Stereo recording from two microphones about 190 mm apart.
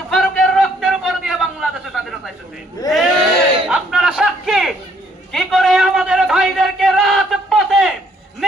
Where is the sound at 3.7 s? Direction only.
5° right (ahead or behind).